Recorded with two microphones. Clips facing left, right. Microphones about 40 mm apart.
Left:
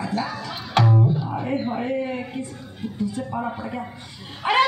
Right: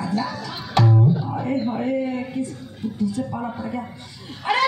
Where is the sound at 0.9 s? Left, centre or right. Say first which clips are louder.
Right 1 dB; centre.